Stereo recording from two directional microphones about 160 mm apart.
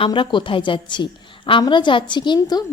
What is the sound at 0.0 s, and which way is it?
A woman's voice, 30° left (ahead or behind).